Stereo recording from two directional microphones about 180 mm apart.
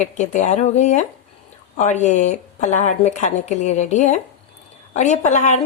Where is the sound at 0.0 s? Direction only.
40° left (ahead or behind).